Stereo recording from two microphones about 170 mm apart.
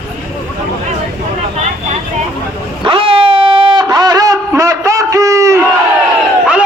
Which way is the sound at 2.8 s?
30° right (ahead or behind).